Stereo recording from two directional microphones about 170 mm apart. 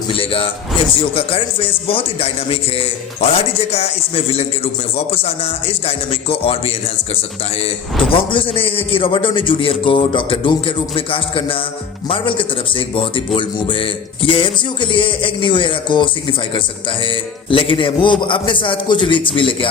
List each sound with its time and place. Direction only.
0.1 s a man's voice: 30° left (ahead or behind)
8.3 s a man's voice: 30° left (ahead or behind)